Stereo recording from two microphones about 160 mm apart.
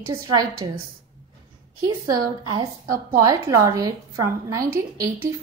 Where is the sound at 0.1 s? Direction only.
20° right (ahead or behind).